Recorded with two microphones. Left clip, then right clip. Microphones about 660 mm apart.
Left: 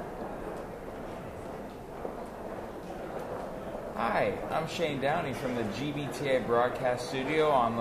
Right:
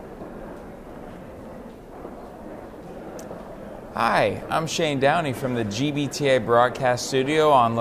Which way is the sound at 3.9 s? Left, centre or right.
Right.